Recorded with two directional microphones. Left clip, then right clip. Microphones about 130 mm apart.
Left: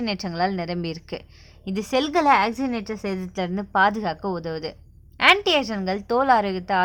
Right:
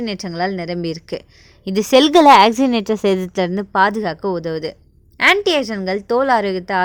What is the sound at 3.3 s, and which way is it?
A woman's voice, 45° right (ahead or behind).